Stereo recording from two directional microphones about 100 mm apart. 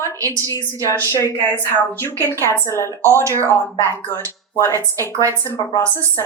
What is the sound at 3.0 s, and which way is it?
Speech, 30° right (ahead or behind).